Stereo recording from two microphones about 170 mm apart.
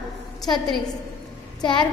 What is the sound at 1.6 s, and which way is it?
Speech, 25° left (ahead or behind).